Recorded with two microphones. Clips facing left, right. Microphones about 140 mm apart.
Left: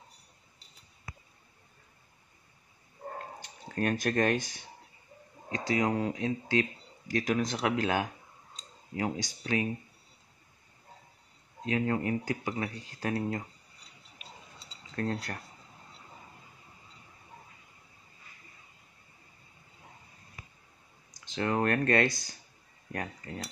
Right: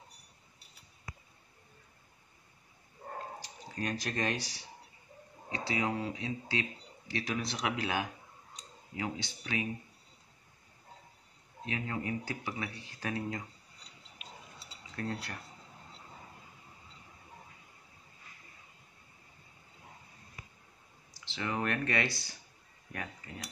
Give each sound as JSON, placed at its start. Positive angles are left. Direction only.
{"t": 3.3, "sound": "speech", "side_deg": 55}
{"t": 11.7, "sound": "speech", "side_deg": 50}
{"t": 15.0, "sound": "speech", "side_deg": 45}
{"t": 21.3, "sound": "speech", "side_deg": 45}